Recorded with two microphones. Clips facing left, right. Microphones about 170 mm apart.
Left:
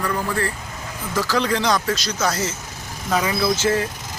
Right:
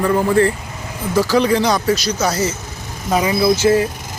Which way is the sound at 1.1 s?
15° right (ahead or behind).